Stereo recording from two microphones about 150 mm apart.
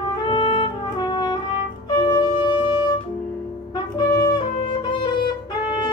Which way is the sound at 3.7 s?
30° left (ahead or behind).